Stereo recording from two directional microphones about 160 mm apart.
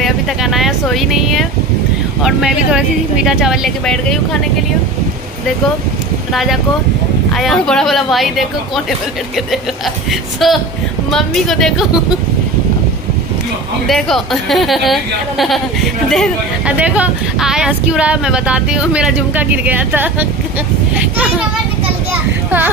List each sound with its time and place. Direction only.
0.0 s vehicle: centre (ahead or behind)
2.2 s a woman's voice: 5° right (ahead or behind)
6.3 s a woman's voice: centre (ahead or behind)
10.4 s a woman's voice: centre (ahead or behind)
13.8 s a woman's voice: centre (ahead or behind)
16.7 s speech: 10° right (ahead or behind)